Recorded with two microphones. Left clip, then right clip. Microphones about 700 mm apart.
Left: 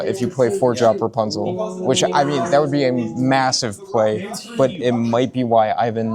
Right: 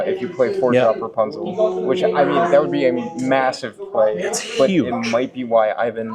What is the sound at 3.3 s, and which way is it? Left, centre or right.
Speech, left.